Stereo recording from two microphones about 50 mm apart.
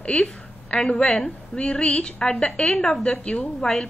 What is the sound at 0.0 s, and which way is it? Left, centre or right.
A woman's voice, centre.